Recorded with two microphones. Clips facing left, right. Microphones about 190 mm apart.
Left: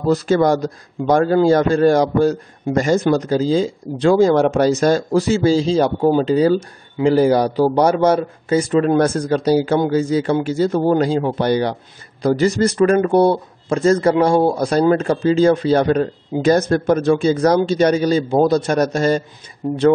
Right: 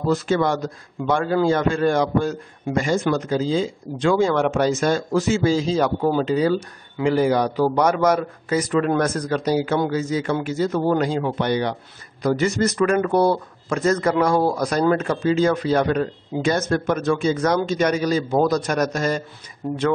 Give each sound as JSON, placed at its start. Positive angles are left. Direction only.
{"t": 0.1, "sound": "speech", "side_deg": 40}